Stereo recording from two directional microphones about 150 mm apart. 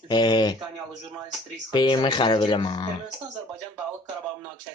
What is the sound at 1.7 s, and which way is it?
Speech, 30° left (ahead or behind).